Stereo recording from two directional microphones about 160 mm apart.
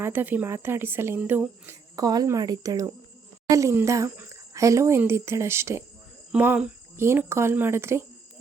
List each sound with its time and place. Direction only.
0.0 s speech: 10° right (ahead or behind)